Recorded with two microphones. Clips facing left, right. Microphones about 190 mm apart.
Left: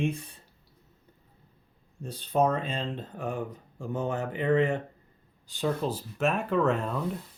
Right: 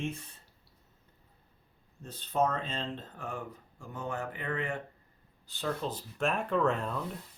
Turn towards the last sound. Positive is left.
turn(degrees=0)  # may be behind; listen again after turning